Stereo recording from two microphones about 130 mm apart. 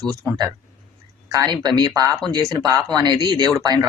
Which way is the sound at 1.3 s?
25° right (ahead or behind).